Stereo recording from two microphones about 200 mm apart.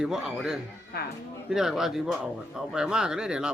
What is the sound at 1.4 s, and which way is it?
Speech, 5° right (ahead or behind).